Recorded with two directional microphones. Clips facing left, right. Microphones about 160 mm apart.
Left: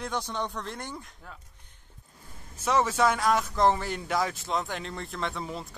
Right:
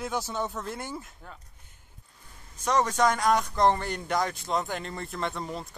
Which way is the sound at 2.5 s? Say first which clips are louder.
Even; 5° left (ahead or behind).